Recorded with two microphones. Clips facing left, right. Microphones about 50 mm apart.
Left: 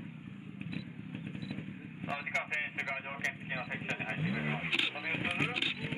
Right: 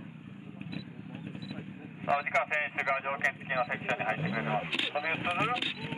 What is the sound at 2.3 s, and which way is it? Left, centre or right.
Speech, right.